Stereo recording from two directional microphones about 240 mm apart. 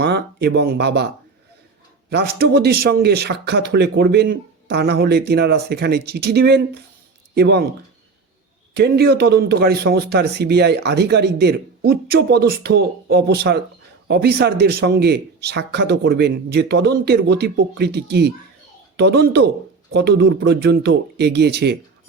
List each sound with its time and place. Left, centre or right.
0.0 s speech: right
2.0 s speech: right
8.7 s speech: right